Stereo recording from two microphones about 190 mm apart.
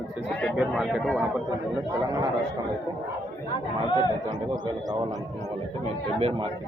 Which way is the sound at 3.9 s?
20° left (ahead or behind).